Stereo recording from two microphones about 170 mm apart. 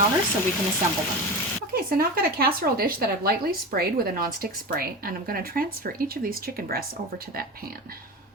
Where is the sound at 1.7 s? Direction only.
60° right (ahead or behind).